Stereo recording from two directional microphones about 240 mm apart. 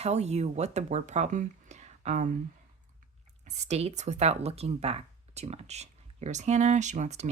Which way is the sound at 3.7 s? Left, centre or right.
Right.